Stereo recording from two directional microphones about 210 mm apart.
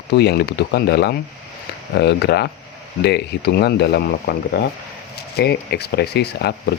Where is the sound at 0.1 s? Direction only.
50° left (ahead or behind).